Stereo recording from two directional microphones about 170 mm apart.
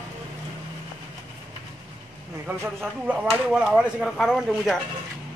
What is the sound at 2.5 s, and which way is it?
Speech, 15° right (ahead or behind).